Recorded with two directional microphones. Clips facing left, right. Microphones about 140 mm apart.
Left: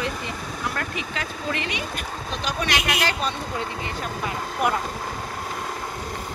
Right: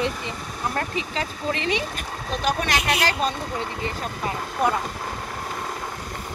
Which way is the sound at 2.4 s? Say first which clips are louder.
Right 3 dB; 50° right (ahead or behind).